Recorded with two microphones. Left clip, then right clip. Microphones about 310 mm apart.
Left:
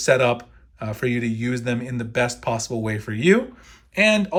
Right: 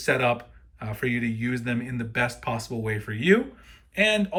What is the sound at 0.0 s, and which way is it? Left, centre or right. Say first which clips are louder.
Speech: left 5 dB; centre.